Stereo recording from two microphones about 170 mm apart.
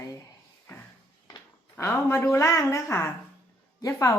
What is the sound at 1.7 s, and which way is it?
A woman's voice, 15° left (ahead or behind).